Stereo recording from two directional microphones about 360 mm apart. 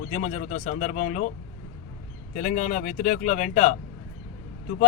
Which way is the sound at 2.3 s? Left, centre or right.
Left.